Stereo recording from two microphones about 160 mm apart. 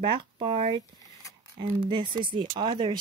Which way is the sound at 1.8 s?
30° right (ahead or behind).